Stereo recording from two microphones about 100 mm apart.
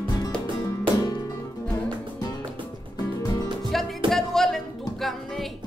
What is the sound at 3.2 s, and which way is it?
Music, 40° left (ahead or behind).